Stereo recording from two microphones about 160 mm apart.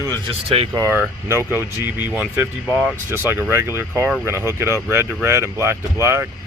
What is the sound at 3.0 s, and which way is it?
Speech, 15° right (ahead or behind).